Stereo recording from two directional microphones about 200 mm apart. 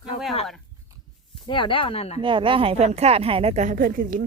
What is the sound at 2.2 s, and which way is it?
A woman's voice, 25° right (ahead or behind).